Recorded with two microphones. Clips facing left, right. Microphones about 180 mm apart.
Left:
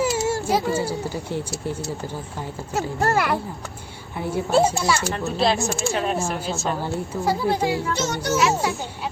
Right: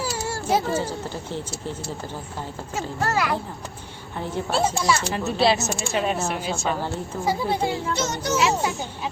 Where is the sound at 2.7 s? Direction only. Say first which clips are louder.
Left 3 dB; 55° left (ahead or behind).